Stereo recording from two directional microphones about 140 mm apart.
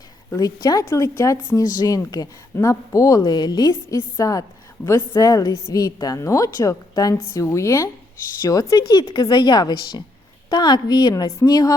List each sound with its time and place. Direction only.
0.3 s a woman's voice: 25° left (ahead or behind)